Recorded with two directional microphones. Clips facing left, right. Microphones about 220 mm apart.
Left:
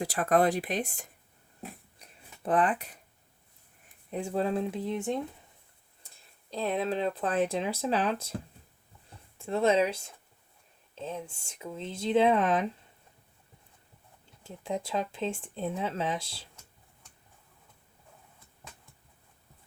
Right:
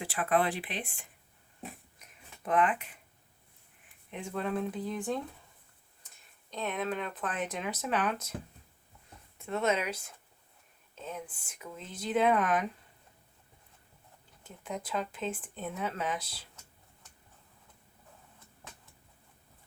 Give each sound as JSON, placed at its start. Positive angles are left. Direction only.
{"t": 0.0, "sound": "speech", "side_deg": 40}
{"t": 2.0, "sound": "a sound", "side_deg": 30}
{"t": 4.1, "sound": "speech", "side_deg": 35}
{"t": 6.5, "sound": "speech", "side_deg": 30}
{"t": 9.4, "sound": "speech", "side_deg": 30}
{"t": 14.4, "sound": "speech", "side_deg": 30}